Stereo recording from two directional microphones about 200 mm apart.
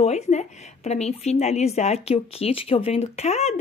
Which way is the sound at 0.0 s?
35° left (ahead or behind).